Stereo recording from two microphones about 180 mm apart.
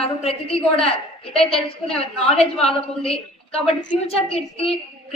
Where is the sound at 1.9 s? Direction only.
35° left (ahead or behind).